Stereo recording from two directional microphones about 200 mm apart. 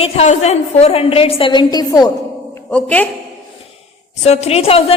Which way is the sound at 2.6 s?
5° left (ahead or behind).